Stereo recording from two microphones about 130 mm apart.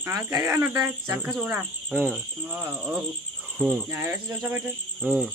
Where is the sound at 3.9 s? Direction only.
20° right (ahead or behind).